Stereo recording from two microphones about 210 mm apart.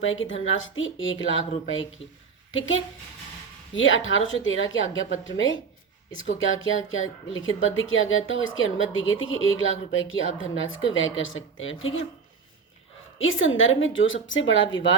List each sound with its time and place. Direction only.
0.0 s a woman's voice: 65° left (ahead or behind)
13.1 s a woman's voice: 70° left (ahead or behind)